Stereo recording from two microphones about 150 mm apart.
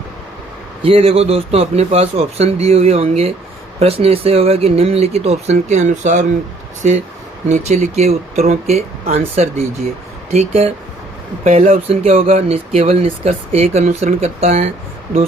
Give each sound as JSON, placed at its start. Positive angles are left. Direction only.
{"t": 0.8, "sound": "a man's voice", "side_deg": -40}
{"t": 7.4, "sound": "a man's voice", "side_deg": -50}
{"t": 11.8, "sound": "speech", "side_deg": -40}